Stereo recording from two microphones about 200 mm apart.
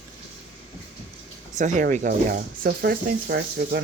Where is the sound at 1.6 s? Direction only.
40° right (ahead or behind).